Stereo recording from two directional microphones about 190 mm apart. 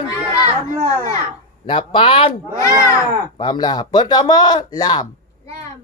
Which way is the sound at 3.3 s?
25° left (ahead or behind).